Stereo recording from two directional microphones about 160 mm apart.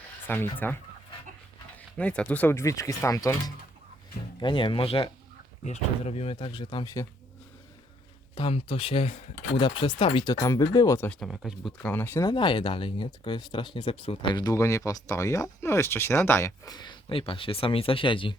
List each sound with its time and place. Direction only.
0.3 s speech: 15° left (ahead or behind)
2.0 s speech: 10° left (ahead or behind)
8.4 s speech: 35° left (ahead or behind)
10.4 s speech: 20° left (ahead or behind)
11.2 s speech: centre (ahead or behind)
11.8 s speech: 10° left (ahead or behind)
12.3 s speech: 30° left (ahead or behind)
14.5 s speech: 20° left (ahead or behind)